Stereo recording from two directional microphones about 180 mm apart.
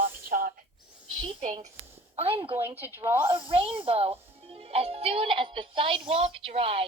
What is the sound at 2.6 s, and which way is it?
Speech, 10° right (ahead or behind).